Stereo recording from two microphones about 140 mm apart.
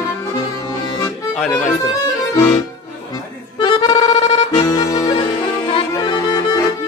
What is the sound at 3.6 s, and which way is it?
Accordion, 35° left (ahead or behind).